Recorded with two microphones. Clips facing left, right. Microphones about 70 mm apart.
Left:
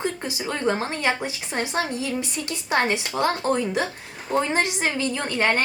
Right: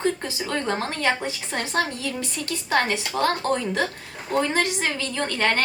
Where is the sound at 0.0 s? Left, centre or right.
Centre.